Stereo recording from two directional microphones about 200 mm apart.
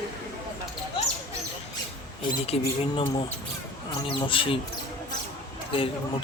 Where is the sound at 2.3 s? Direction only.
25° left (ahead or behind).